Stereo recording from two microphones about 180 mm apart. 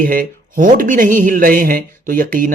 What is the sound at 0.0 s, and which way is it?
Speech, 50° right (ahead or behind).